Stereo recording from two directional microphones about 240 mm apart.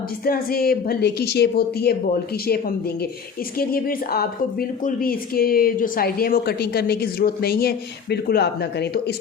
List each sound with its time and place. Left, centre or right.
0.3 s speech: left
3.6 s speech: left